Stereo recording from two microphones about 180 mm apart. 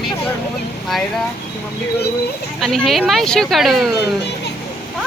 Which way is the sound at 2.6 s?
Centre (ahead or behind).